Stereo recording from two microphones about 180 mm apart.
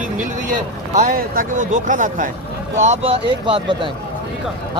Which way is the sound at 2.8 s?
35° right (ahead or behind).